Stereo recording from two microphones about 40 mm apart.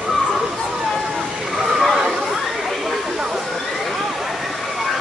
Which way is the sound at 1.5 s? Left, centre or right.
Centre.